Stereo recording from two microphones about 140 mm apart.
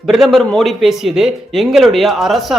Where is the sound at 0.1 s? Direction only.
Centre (ahead or behind).